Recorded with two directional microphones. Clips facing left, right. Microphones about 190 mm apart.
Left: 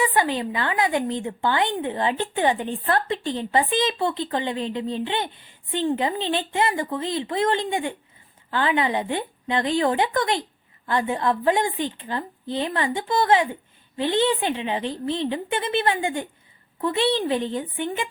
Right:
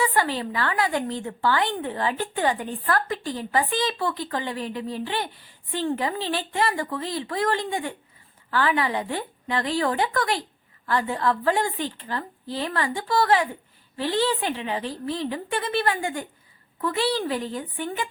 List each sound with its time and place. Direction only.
0.0 s a woman's voice: 20° left (ahead or behind)